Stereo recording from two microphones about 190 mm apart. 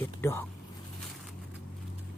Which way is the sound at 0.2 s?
10° left (ahead or behind).